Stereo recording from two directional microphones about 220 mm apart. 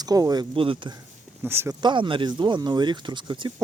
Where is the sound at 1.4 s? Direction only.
10° right (ahead or behind).